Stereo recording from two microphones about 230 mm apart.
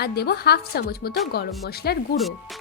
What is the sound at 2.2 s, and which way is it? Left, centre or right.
Speech, centre.